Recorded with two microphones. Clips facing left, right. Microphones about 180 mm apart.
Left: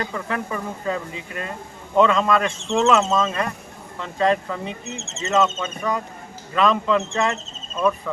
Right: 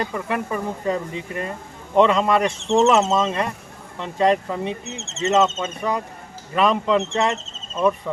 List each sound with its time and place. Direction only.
0.1 s speech: 15° right (ahead or behind)
2.0 s speech: 15° right (ahead or behind)